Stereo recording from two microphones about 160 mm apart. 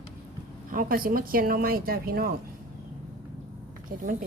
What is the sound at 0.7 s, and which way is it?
Speech, 60° right (ahead or behind).